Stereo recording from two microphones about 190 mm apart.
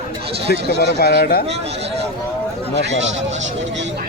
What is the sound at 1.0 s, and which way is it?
Speech, 55° left (ahead or behind).